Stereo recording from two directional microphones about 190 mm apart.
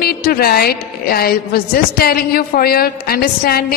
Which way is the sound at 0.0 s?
50° left (ahead or behind).